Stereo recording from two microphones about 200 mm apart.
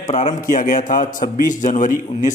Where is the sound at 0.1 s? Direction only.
35° left (ahead or behind).